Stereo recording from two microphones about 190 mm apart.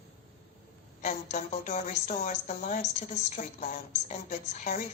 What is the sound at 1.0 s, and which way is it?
A woman's voice, 35° left (ahead or behind).